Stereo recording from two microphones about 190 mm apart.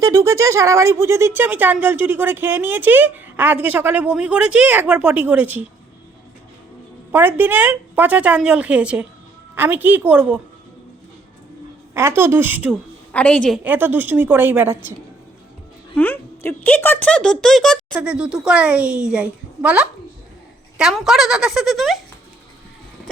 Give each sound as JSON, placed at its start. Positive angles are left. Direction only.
{"t": 0.0, "sound": "speech", "side_deg": -15}
{"t": 7.1, "sound": "speech", "side_deg": -10}
{"t": 11.9, "sound": "speech", "side_deg": -10}
{"t": 13.1, "sound": "speech", "side_deg": 5}
{"t": 13.7, "sound": "speech", "side_deg": -10}
{"t": 16.0, "sound": "a child's voice", "side_deg": 10}